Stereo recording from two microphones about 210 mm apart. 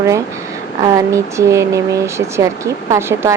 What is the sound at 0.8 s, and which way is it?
Speech, 15° right (ahead or behind).